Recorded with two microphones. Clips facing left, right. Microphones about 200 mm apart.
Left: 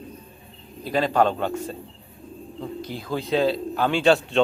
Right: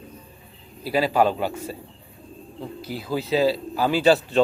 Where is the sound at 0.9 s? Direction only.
5° right (ahead or behind).